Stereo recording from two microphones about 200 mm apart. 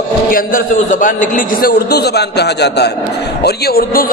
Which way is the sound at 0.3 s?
45° left (ahead or behind).